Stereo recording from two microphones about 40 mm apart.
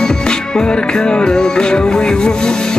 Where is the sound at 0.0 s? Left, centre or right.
Centre.